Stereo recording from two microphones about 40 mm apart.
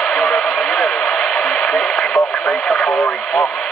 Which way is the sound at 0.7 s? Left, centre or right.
Centre.